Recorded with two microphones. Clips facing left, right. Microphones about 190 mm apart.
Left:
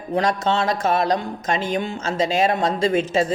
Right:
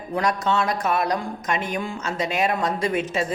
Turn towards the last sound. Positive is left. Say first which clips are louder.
# left 5 dB
turn(degrees=30)  # may be behind; listen again after turning